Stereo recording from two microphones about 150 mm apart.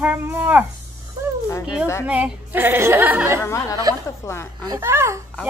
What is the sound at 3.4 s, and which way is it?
Speech, 20° left (ahead or behind).